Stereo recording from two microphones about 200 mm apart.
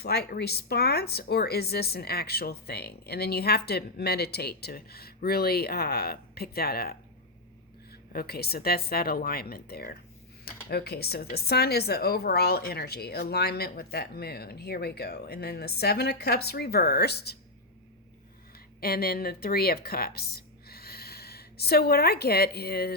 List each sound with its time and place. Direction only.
0.0 s speech: 55° left (ahead or behind)
8.1 s speech: 50° left (ahead or behind)
18.8 s a woman's voice: 50° left (ahead or behind)